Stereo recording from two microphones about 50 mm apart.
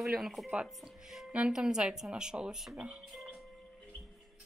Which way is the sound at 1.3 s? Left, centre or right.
Centre.